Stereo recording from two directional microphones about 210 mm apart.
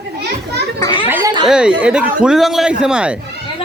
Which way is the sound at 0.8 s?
20° left (ahead or behind).